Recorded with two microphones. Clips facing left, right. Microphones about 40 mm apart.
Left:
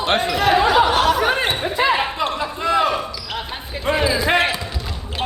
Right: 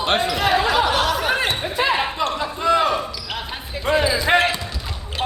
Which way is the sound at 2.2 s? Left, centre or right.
Centre.